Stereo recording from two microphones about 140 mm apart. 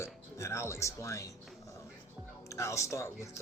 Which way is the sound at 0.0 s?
20° left (ahead or behind).